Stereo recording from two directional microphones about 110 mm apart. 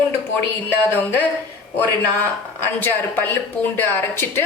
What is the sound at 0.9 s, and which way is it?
Speech, 20° left (ahead or behind).